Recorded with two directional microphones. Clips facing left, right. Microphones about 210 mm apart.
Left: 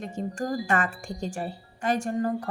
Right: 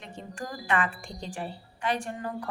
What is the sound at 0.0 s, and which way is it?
Speech, 45° left (ahead or behind).